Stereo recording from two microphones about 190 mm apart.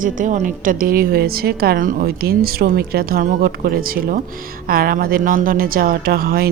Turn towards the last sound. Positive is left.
turn(degrees=-55)  # may be behind; listen again after turning